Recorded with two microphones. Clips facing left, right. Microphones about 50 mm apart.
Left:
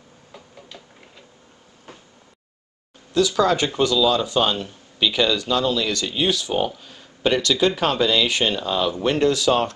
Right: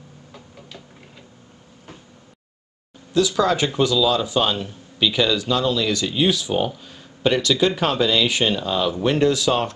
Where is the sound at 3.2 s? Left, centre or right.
Centre.